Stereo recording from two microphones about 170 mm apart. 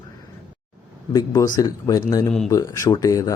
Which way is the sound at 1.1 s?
20° left (ahead or behind).